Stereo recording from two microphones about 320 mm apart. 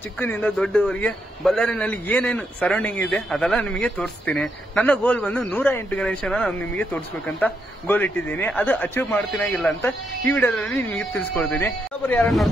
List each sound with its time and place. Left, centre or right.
0.2 s a man's voice: centre